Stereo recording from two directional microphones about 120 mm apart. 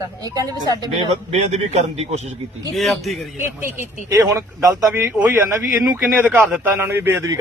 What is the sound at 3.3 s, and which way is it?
Speech, 20° right (ahead or behind).